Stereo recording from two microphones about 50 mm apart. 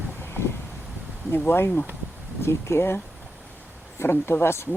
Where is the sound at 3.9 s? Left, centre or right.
Left.